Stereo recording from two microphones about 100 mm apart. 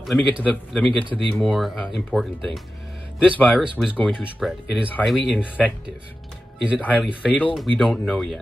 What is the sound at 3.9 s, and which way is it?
Speech, 15° left (ahead or behind).